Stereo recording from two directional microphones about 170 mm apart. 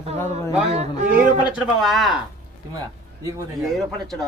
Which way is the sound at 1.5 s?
Centre (ahead or behind).